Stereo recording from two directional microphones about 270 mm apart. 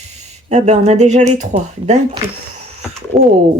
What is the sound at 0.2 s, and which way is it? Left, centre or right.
Speech, right.